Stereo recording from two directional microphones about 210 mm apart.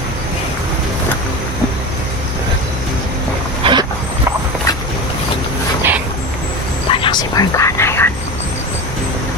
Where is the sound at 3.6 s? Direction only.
20° right (ahead or behind).